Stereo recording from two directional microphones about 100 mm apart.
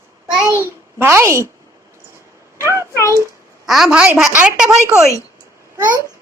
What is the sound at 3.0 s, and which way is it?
Speech, 30° right (ahead or behind).